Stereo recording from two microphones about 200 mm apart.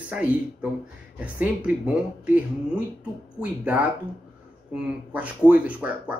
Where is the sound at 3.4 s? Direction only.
5° right (ahead or behind).